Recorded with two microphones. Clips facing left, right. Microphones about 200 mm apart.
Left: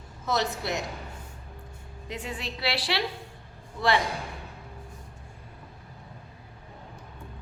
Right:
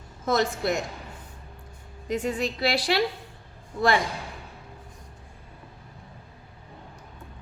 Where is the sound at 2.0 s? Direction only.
45° right (ahead or behind).